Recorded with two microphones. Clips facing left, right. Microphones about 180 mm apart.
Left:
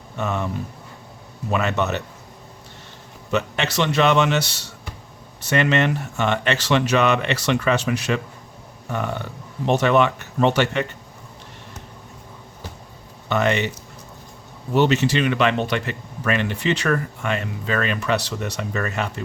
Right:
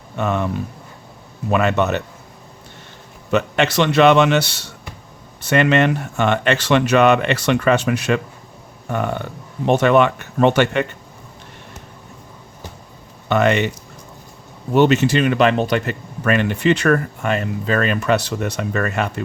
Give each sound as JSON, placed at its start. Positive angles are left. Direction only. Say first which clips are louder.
{"t": 0.2, "sound": "speech", "louder": "right 4 dB", "side_deg": -60}
{"t": 3.3, "sound": "speech", "louder": "right 5 dB", "side_deg": -60}
{"t": 13.2, "sound": "speech", "louder": "right 4 dB", "side_deg": -60}
{"t": 14.7, "sound": "speech", "louder": "right 4 dB", "side_deg": -50}